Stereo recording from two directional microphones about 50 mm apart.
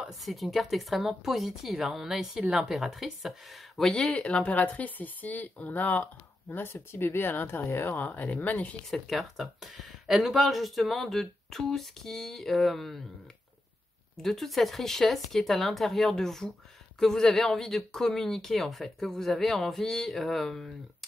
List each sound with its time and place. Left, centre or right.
0.0 s speech: centre
4.0 s speech: centre; by 6.0 s left
6.5 s speech: left
7.9 s speech: left
9.0 s speech: centre
14.1 s speech: centre